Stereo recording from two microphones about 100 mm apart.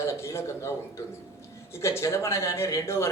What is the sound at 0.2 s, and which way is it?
Speech, 30° left (ahead or behind).